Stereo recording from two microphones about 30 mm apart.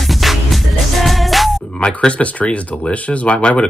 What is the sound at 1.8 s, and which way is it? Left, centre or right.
Speech, left.